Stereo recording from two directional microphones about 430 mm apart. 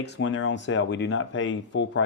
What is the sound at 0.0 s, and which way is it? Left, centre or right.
Speech, left.